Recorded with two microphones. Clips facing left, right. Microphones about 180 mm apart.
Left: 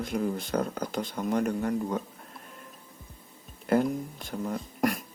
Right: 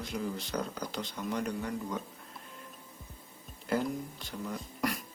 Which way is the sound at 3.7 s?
50° left (ahead or behind).